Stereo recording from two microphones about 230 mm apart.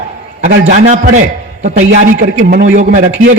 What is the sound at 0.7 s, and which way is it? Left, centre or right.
Speech, right.